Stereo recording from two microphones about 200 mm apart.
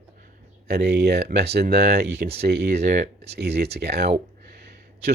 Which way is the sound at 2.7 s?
35° right (ahead or behind).